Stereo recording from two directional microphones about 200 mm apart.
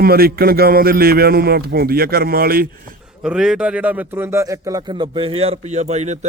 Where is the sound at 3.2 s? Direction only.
5° right (ahead or behind).